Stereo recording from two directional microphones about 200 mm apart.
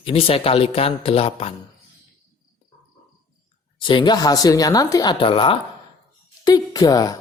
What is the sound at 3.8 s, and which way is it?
Speech, 25° left (ahead or behind).